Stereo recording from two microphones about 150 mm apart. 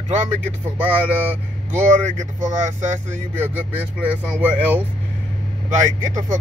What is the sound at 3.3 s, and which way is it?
Speech, 10° right (ahead or behind).